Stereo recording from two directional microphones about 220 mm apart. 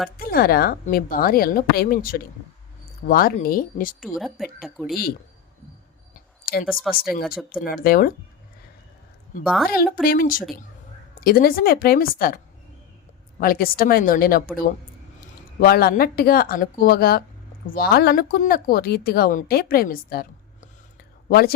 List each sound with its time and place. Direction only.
0.2 s a woman's voice: 45° left (ahead or behind)
4.0 s speech: centre (ahead or behind)
6.4 s a sound: 45° left (ahead or behind)
6.7 s speech: centre (ahead or behind)
7.0 s a woman's voice: 40° left (ahead or behind)
9.6 s a woman's voice: 40° left (ahead or behind)
13.4 s a woman's voice: 40° left (ahead or behind)
15.6 s a woman's voice: 45° left (ahead or behind)